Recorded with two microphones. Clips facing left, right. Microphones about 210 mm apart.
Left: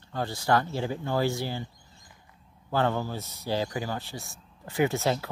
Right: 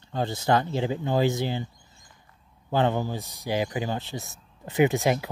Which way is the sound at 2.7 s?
20° right (ahead or behind).